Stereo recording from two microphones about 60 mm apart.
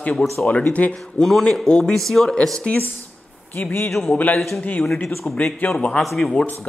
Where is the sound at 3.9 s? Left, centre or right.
Centre.